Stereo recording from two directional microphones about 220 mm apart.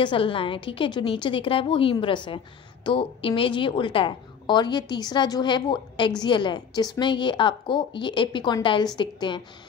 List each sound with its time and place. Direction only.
0.0 s a woman's voice: 25° left (ahead or behind)